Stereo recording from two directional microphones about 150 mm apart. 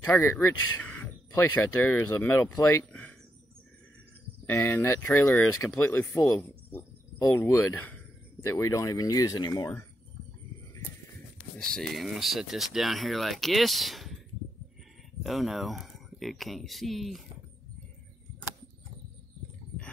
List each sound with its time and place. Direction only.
0.1 s speech: 15° left (ahead or behind)
4.5 s speech: 15° left (ahead or behind)
11.5 s speech: 5° left (ahead or behind)
15.2 s speech: centre (ahead or behind)